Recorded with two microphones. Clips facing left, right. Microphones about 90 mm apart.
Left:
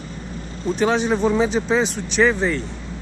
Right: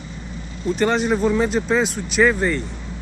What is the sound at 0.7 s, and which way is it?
A man's voice, centre (ahead or behind).